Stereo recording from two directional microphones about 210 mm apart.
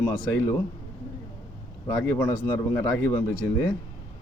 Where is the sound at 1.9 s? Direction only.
10° left (ahead or behind).